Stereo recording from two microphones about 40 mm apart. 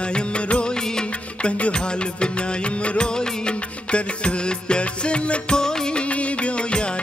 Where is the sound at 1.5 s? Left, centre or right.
Left.